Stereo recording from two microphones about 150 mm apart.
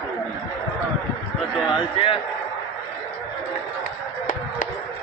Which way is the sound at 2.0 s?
35° left (ahead or behind).